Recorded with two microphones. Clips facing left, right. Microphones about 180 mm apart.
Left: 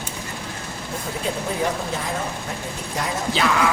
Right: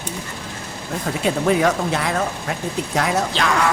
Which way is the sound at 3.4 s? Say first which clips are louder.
Even; 5° left (ahead or behind).